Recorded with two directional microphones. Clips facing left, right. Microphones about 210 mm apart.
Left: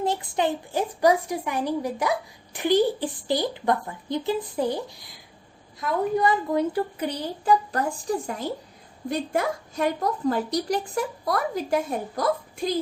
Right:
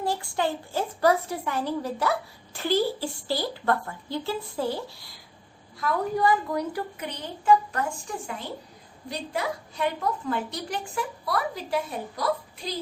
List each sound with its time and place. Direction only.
0.0 s a woman's voice: 20° left (ahead or behind); by 12.7 s 50° left (ahead or behind)